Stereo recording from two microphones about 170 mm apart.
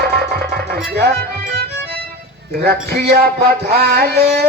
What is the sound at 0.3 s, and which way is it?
Music, 60° right (ahead or behind).